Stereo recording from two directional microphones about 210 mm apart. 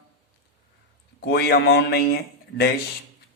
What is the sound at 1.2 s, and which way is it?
Speech, 50° left (ahead or behind).